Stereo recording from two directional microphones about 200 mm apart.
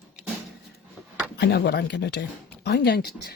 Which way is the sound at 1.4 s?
60° left (ahead or behind).